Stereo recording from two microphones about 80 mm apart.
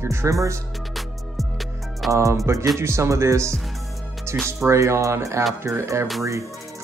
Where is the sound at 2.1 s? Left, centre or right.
Right.